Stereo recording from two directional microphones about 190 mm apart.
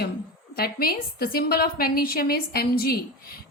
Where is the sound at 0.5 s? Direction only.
55° left (ahead or behind).